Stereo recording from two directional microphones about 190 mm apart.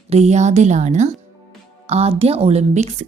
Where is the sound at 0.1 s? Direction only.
35° right (ahead or behind).